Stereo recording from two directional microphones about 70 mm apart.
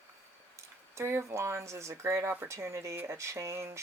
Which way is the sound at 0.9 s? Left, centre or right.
Right.